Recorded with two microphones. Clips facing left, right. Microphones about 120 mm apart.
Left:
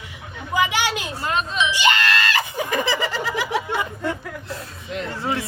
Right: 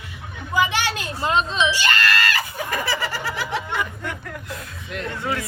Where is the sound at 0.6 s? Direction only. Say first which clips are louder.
Even; 15° left (ahead or behind).